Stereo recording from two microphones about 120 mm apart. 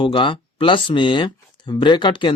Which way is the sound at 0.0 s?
45° left (ahead or behind).